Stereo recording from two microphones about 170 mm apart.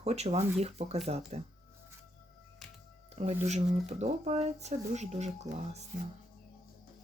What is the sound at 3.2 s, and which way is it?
Speech, 40° right (ahead or behind).